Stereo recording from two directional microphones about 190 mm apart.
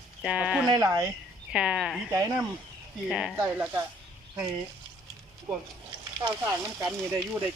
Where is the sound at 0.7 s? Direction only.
20° right (ahead or behind).